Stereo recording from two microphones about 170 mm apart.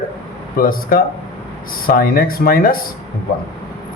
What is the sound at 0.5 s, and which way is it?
A man's voice, 55° left (ahead or behind).